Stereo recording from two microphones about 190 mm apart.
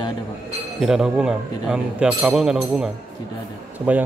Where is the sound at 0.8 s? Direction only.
5° right (ahead or behind).